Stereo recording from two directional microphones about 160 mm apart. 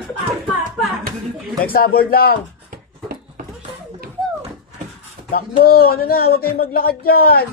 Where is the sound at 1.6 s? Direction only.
65° left (ahead or behind).